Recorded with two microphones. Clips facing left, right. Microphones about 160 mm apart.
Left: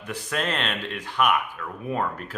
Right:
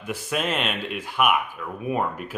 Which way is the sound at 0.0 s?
10° right (ahead or behind).